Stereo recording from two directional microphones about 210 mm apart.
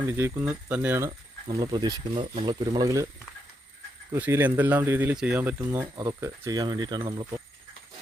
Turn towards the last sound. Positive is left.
turn(degrees=-25)  # may be behind; listen again after turning